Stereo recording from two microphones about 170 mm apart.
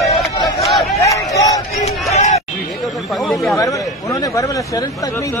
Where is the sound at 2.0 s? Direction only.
40° left (ahead or behind).